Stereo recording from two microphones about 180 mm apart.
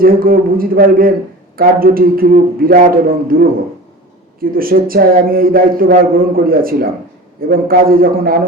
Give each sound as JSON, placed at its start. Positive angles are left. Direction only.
{"t": 0.0, "sound": "a man's voice", "side_deg": -55}
{"t": 4.4, "sound": "a man's voice", "side_deg": -55}